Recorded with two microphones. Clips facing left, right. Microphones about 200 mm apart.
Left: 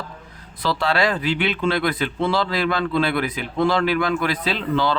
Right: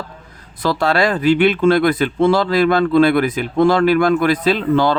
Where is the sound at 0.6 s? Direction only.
45° right (ahead or behind).